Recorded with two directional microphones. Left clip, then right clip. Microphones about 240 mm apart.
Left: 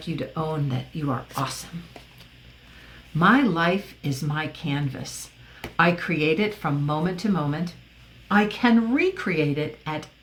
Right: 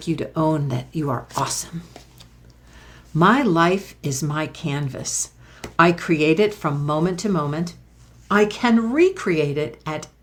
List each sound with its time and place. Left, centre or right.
0.0 s speech: right
3.2 s speech: right